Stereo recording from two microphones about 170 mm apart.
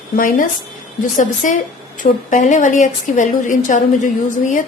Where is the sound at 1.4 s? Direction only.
50° left (ahead or behind).